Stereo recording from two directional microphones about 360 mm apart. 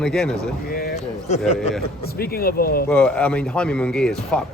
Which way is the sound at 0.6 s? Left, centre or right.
Left.